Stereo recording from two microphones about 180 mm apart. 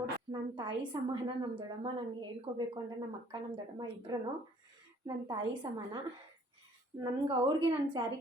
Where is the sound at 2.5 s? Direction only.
40° right (ahead or behind).